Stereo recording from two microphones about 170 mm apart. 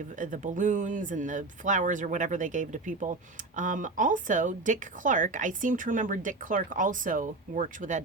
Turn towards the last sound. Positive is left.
turn(degrees=-50)  # may be behind; listen again after turning